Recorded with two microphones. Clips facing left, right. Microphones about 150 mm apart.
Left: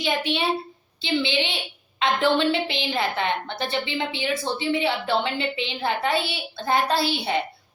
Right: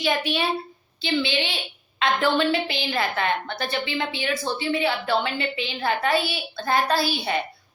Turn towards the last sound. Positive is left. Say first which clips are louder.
# even
turn(degrees=20)  # may be behind; listen again after turning